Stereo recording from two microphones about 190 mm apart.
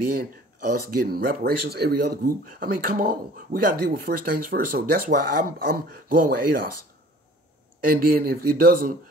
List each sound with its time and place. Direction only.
0.2 s speech: 50° right (ahead or behind)
7.8 s speech: 50° right (ahead or behind)